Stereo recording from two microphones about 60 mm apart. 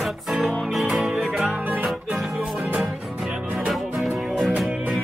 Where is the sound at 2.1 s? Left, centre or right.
Centre.